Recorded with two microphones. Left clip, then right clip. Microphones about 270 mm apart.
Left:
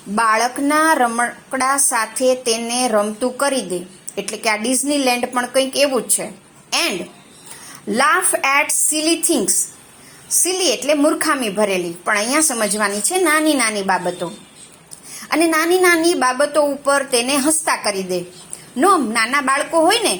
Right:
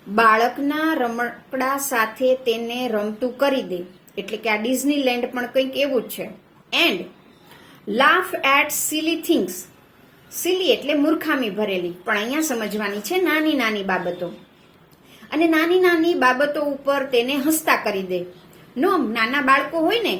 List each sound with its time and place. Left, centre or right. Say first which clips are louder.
0.2 s a woman's voice: even; centre
7.9 s a woman's voice: left 1 dB; centre
10.4 s a woman's voice: left 1 dB; centre
15.3 s a woman's voice: left 3 dB; centre